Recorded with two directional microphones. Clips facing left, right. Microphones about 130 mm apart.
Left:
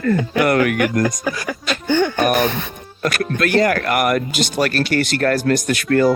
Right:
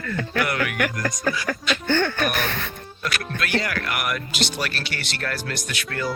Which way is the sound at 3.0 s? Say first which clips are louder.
Left 9 dB; 45° left (ahead or behind).